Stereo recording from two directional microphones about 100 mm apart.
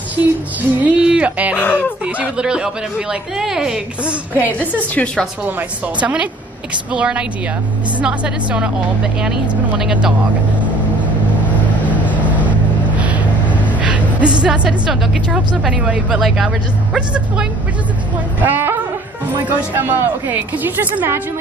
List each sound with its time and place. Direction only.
0.1 s a sound: 15° right (ahead or behind)
1.6 s speech: 15° left (ahead or behind)
2.1 s speech: 10° right (ahead or behind)
4.4 s a woman's voice: 20° left (ahead or behind)
5.6 s speech: 15° right (ahead or behind)
11.8 s vehicle: 15° right (ahead or behind)
18.4 s a woman's voice: 20° right (ahead or behind)